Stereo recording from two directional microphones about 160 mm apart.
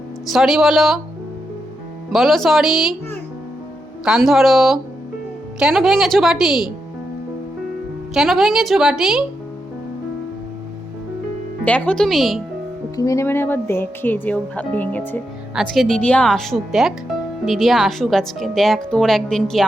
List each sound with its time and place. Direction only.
0.3 s a woman's voice: centre (ahead or behind)
2.1 s a woman's voice: centre (ahead or behind)
4.0 s a woman's voice: centre (ahead or behind)
8.1 s a woman's voice: 5° right (ahead or behind)
11.6 s a woman's voice: 10° left (ahead or behind)
13.0 s speech: 20° left (ahead or behind)
15.5 s a woman's voice: centre (ahead or behind)